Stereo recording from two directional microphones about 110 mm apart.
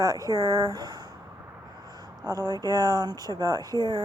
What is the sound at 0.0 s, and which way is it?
Speech, 30° right (ahead or behind).